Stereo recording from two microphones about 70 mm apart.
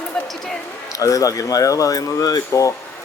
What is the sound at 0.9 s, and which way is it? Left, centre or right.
Speech, left.